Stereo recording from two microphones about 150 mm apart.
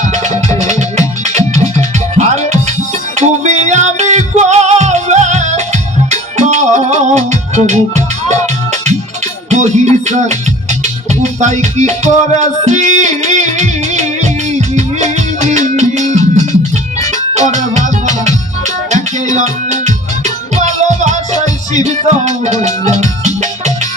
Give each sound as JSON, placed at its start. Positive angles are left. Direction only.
{"t": 0.1, "sound": "music", "side_deg": -50}
{"t": 22.2, "sound": "music", "side_deg": -50}